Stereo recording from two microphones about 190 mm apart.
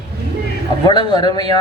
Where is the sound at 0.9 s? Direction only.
20° left (ahead or behind).